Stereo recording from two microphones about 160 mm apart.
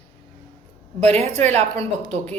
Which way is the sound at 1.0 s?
40° right (ahead or behind).